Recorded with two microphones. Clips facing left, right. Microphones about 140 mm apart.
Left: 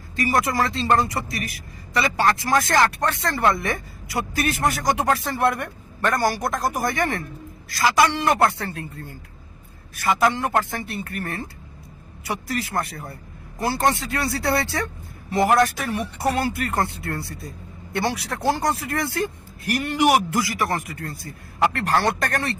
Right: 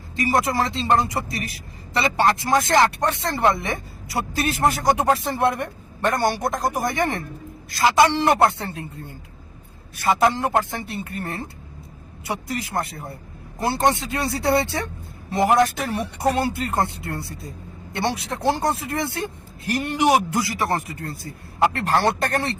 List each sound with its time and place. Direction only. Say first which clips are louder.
0.2 s a woman's voice: right 1 dB; 25° right (ahead or behind)
10.0 s a woman's voice: right 1 dB; 25° right (ahead or behind)